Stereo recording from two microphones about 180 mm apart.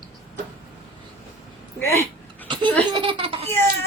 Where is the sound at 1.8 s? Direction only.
15° left (ahead or behind).